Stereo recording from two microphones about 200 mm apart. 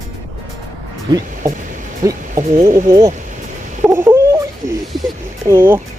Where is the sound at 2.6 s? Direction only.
35° right (ahead or behind).